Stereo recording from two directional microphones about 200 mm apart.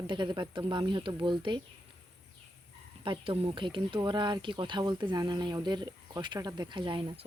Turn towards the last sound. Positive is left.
turn(degrees=-25)  # may be behind; listen again after turning